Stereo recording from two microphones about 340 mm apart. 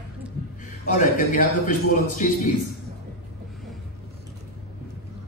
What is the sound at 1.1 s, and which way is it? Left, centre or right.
A man's voice, left.